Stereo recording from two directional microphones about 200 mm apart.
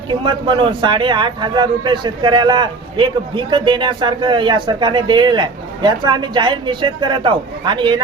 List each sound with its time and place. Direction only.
0.1 s a man's voice: 25° right (ahead or behind)